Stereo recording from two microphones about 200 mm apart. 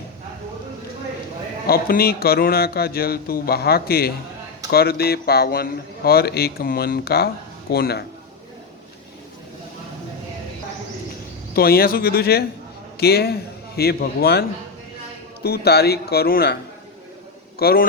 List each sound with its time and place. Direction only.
1.6 s speech: 50° left (ahead or behind)
11.5 s speech: 50° left (ahead or behind)
15.4 s speech: 55° left (ahead or behind)
17.6 s speech: 50° left (ahead or behind)